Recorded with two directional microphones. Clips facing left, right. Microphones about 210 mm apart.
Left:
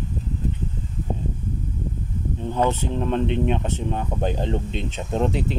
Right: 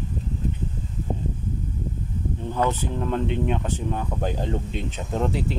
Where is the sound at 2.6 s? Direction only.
25° left (ahead or behind).